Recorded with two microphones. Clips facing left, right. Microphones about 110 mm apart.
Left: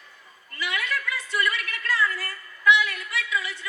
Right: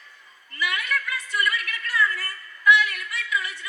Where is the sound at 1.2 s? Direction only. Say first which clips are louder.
Even; 25° left (ahead or behind).